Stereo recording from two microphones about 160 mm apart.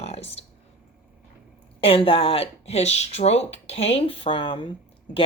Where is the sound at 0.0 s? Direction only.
40° left (ahead or behind).